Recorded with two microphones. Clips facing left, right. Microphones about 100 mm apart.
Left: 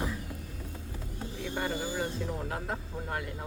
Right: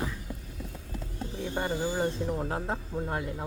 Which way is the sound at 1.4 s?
30° right (ahead or behind).